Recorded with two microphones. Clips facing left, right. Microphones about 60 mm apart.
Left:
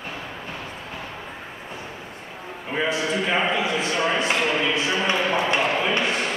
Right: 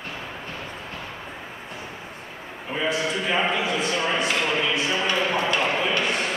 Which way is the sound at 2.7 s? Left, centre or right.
Left.